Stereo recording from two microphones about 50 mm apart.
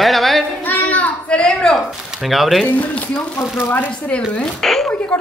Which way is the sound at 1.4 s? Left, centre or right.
Centre.